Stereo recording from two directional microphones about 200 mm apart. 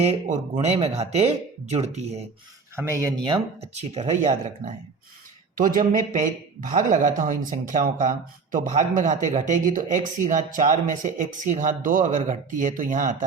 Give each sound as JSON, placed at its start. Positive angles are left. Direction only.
{"t": 0.0, "sound": "speech", "side_deg": -35}
{"t": 2.7, "sound": "speech", "side_deg": -15}
{"t": 3.3, "sound": "speech", "side_deg": -35}